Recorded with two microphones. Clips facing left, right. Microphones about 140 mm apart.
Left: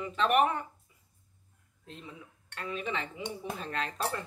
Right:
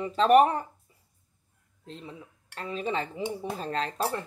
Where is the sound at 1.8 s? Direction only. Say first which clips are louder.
Right 4 dB; 30° right (ahead or behind).